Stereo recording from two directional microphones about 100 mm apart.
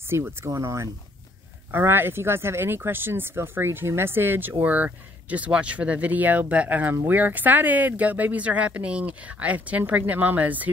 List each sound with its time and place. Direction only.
0.0 s speech: 25° right (ahead or behind)